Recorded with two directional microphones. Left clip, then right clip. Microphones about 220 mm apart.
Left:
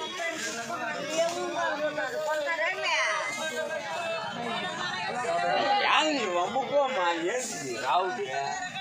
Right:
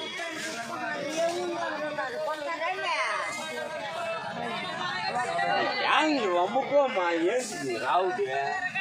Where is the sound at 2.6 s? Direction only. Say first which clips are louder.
Right 2 dB; 45° right (ahead or behind).